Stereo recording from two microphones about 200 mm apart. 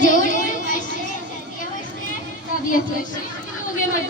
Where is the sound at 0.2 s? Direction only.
40° left (ahead or behind).